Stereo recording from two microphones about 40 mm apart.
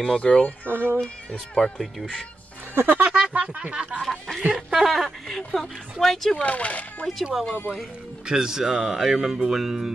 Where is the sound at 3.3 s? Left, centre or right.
Right.